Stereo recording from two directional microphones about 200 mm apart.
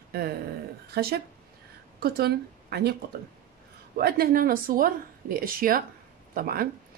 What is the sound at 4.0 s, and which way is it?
Speech, 50° right (ahead or behind).